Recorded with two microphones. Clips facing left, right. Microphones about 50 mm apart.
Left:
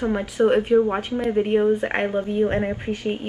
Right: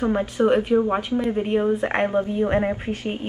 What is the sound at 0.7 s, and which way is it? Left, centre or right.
A woman's voice, centre.